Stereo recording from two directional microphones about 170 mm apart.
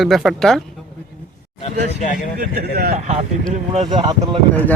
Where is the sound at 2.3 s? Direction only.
60° right (ahead or behind).